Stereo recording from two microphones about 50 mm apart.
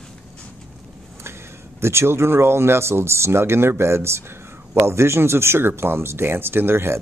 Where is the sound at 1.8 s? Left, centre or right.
Right.